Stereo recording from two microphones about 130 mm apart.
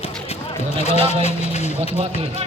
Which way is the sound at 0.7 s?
55° left (ahead or behind).